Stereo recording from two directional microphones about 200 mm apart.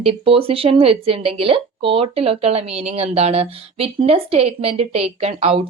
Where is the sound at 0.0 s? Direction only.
25° right (ahead or behind).